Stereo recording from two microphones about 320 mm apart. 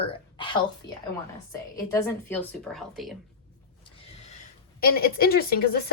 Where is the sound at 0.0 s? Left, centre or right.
Centre.